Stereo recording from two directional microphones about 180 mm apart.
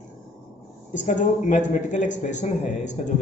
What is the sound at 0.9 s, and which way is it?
A man's voice, 45° left (ahead or behind).